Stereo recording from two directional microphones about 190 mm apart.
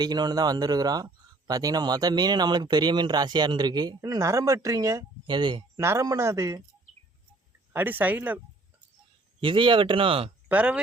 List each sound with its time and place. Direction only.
0.0 s speech: 20° right (ahead or behind)
7.7 s speech: 10° right (ahead or behind)
9.4 s speech: 25° right (ahead or behind)
10.5 s speech: 5° right (ahead or behind)